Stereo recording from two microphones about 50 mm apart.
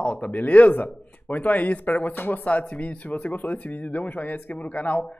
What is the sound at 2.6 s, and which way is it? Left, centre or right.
Speech, left.